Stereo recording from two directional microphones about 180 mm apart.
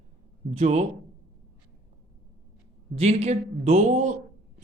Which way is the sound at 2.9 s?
35° right (ahead or behind).